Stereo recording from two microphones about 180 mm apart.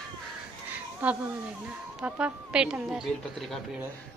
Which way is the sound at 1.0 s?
10° right (ahead or behind).